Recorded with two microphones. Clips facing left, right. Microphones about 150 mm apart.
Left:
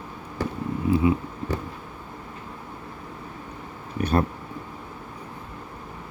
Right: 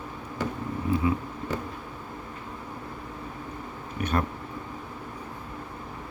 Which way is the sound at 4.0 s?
35° left (ahead or behind).